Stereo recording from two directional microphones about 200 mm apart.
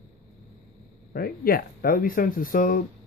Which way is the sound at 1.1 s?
45° left (ahead or behind).